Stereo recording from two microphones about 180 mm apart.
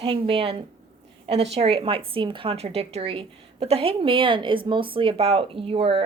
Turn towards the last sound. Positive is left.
turn(degrees=-30)  # may be behind; listen again after turning